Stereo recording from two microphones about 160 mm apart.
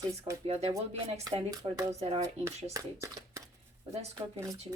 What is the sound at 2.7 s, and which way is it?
Speech, 20° right (ahead or behind).